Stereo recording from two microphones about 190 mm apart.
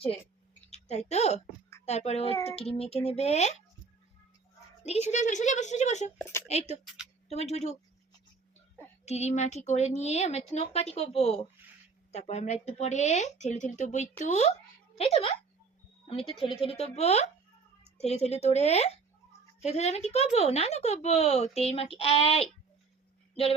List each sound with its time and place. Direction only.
0.7 s a woman's voice: 35° left (ahead or behind)
4.8 s a woman's voice: 35° left (ahead or behind)
6.8 s a woman's voice: 5° right (ahead or behind)
7.3 s speech: 35° left (ahead or behind)
9.0 s speech: 35° left (ahead or behind)